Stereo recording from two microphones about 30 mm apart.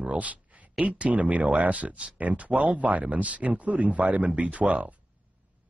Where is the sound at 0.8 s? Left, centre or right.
Right.